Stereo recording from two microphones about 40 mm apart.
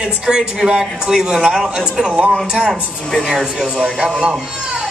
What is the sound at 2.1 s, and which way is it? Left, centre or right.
Speech, right.